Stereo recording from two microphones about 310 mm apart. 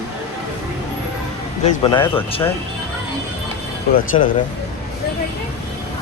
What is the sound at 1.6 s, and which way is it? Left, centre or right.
Speech, centre.